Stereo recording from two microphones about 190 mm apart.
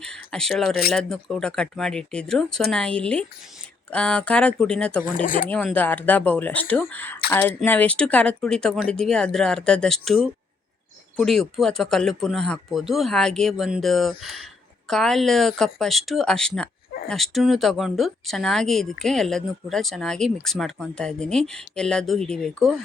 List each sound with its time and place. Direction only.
0.0 s speech: 5° left (ahead or behind)
5.0 s speech: 45° left (ahead or behind)
5.5 s speech: 5° left (ahead or behind)
11.2 s speech: centre (ahead or behind)